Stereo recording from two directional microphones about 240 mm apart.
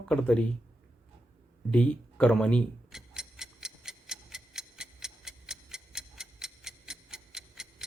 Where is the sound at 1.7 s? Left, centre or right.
Centre.